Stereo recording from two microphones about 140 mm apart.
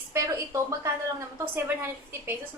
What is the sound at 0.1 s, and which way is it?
Speech, 20° right (ahead or behind).